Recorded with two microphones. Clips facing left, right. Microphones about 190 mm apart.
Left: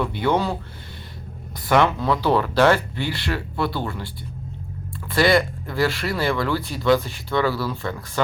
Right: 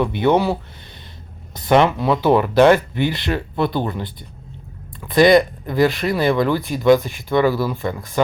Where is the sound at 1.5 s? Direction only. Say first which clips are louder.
Right 4 dB; 20° right (ahead or behind).